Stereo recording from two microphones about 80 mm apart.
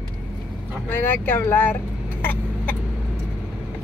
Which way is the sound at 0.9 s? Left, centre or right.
Left.